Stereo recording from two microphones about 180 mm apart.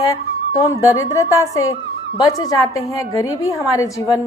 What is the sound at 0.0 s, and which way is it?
A woman's voice, 20° left (ahead or behind).